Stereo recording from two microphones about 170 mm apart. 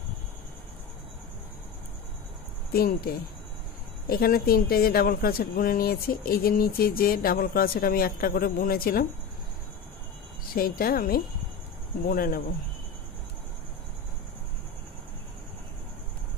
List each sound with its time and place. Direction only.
2.7 s speech: 65° left (ahead or behind)
10.5 s speech: 60° left (ahead or behind)